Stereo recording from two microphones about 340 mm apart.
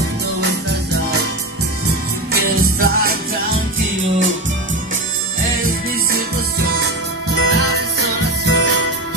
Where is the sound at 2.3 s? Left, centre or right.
Right.